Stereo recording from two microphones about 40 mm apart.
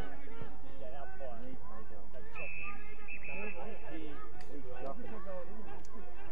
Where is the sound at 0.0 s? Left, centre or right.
Centre.